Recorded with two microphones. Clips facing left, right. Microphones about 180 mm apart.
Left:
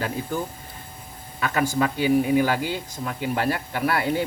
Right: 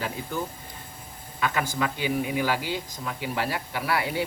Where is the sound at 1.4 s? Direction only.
40° left (ahead or behind).